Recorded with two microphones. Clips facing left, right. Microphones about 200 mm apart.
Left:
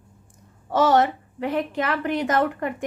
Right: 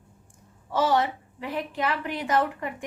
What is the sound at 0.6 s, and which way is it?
A child's voice, 45° left (ahead or behind).